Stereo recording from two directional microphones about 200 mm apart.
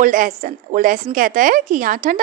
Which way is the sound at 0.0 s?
40° right (ahead or behind).